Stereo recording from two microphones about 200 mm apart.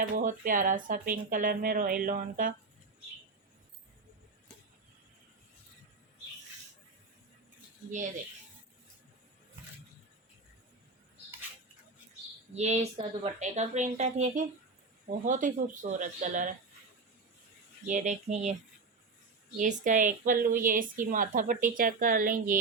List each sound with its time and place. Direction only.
0.2 s a woman's voice: 40° right (ahead or behind)
12.5 s speech: 30° right (ahead or behind)
17.8 s speech: 40° right (ahead or behind)
19.5 s a woman's voice: 40° right (ahead or behind)